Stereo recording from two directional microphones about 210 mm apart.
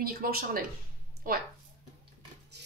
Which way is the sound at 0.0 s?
45° right (ahead or behind).